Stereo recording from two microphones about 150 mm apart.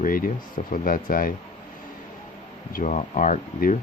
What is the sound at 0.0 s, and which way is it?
Speech, 70° left (ahead or behind).